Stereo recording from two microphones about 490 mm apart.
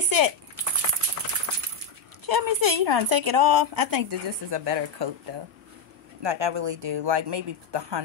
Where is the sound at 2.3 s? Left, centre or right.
Right.